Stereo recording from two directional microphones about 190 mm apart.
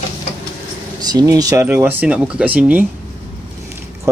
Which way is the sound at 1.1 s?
20° right (ahead or behind).